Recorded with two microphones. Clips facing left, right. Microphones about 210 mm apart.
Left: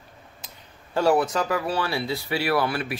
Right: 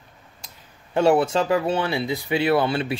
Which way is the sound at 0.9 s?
25° right (ahead or behind).